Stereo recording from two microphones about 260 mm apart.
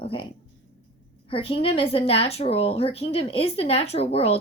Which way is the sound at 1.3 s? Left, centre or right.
Left.